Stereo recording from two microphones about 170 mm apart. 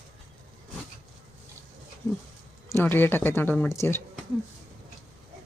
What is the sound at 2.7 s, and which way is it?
Speech, 10° left (ahead or behind).